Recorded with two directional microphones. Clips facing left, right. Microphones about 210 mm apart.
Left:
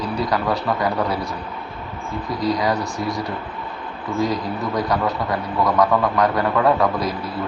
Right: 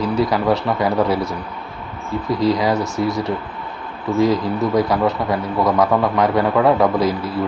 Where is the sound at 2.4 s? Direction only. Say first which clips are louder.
Right 3 dB; 25° right (ahead or behind).